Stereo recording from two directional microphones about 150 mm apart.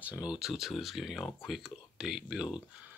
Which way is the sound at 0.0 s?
10° right (ahead or behind).